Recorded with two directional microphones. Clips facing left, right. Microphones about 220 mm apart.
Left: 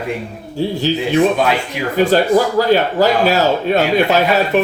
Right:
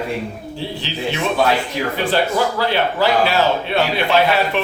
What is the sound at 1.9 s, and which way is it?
Speech, 45° left (ahead or behind).